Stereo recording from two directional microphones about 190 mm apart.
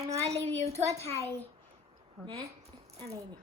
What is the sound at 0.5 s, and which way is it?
Speech, 35° right (ahead or behind).